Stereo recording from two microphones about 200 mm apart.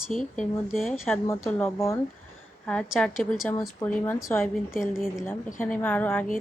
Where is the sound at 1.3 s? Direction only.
10° left (ahead or behind).